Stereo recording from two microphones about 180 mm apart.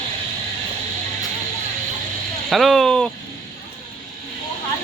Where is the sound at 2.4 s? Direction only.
Centre (ahead or behind).